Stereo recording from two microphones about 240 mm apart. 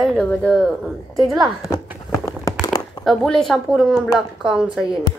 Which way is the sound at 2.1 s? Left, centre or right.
Centre.